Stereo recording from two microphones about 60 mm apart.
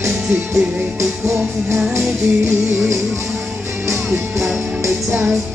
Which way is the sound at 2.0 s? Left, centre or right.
Right.